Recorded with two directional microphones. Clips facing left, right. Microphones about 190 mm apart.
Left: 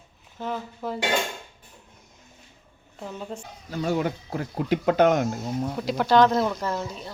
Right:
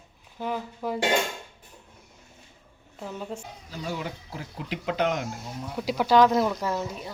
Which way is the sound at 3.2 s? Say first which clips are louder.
Even; 5° right (ahead or behind).